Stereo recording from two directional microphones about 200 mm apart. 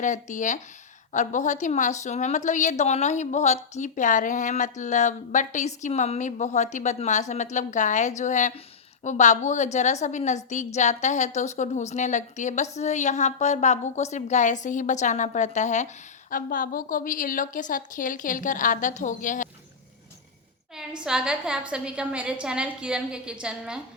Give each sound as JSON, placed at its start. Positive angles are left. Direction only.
{"t": 0.0, "sound": "a woman's voice", "side_deg": 40}
{"t": 20.7, "sound": "a woman's voice", "side_deg": -5}